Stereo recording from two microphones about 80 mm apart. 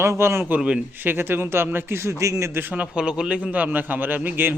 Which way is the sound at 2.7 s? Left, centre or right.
Centre.